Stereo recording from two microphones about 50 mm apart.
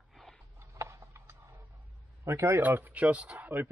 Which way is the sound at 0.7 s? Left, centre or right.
Right.